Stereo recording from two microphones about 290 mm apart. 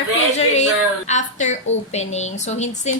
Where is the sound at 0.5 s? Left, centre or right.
Left.